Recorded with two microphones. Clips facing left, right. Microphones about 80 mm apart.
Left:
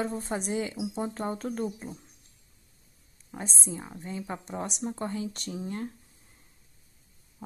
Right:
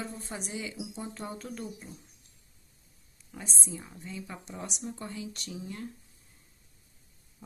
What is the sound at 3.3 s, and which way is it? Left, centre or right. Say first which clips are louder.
Speech: left 4 dB; left.